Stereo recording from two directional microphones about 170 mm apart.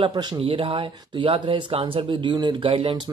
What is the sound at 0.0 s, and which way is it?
Speech, 25° right (ahead or behind).